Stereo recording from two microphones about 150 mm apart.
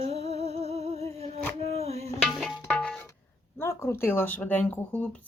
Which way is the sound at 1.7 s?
45° right (ahead or behind).